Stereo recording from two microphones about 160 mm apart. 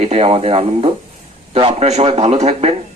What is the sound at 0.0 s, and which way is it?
A man's voice, 40° right (ahead or behind).